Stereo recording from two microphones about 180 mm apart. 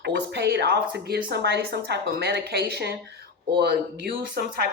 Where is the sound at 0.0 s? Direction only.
70° right (ahead or behind).